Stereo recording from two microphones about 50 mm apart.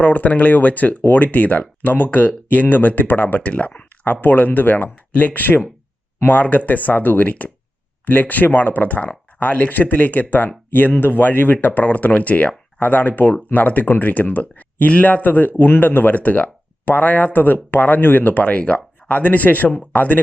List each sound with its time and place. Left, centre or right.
0.0 s speech: left
3.5 s speech: left